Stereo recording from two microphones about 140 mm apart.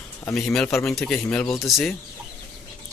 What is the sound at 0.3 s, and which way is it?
Speech, 5° left (ahead or behind).